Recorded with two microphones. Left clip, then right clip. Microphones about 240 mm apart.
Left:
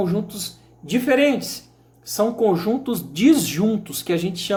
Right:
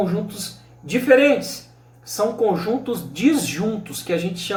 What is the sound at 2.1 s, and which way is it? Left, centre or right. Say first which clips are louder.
Speech: left 1 dB; left.